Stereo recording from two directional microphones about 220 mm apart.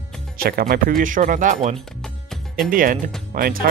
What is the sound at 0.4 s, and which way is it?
Speech, 40° right (ahead or behind).